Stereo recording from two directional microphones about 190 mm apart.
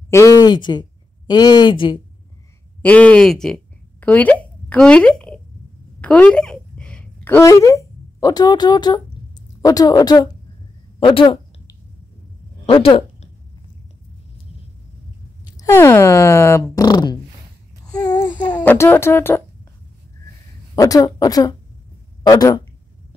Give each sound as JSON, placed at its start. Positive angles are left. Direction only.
{"t": 0.1, "sound": "speech", "side_deg": 15}
{"t": 2.8, "sound": "speech", "side_deg": 10}
{"t": 5.9, "sound": "a sound", "side_deg": 5}
{"t": 15.5, "sound": "speech", "side_deg": 15}
{"t": 18.0, "sound": "a sound", "side_deg": 20}
{"t": 18.6, "sound": "speech", "side_deg": 10}
{"t": 20.7, "sound": "speech", "side_deg": 20}